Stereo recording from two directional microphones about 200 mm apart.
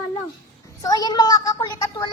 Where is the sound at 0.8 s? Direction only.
20° left (ahead or behind).